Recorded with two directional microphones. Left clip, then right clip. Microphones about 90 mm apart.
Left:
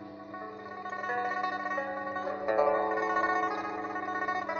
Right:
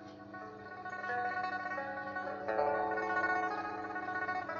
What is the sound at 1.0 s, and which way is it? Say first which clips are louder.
Music: left 4 dB; 30° left (ahead or behind).